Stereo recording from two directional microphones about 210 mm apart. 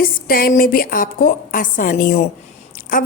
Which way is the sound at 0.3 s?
45° left (ahead or behind).